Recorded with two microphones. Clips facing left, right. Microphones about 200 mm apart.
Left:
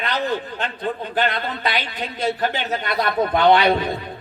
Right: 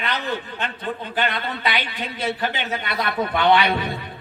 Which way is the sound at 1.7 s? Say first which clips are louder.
Left 1 dB; 45° left (ahead or behind).